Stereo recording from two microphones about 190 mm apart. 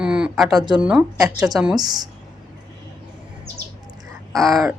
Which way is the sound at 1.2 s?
20° right (ahead or behind).